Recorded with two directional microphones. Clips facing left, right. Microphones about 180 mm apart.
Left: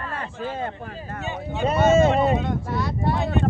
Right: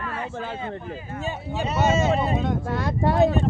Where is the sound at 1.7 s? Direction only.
50° left (ahead or behind).